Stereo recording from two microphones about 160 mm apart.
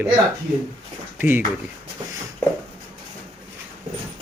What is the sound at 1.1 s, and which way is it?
Speech, 10° right (ahead or behind).